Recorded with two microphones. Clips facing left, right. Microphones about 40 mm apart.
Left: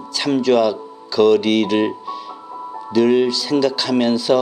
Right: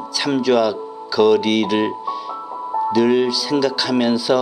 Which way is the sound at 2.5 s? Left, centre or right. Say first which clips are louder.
Right 10 dB; centre.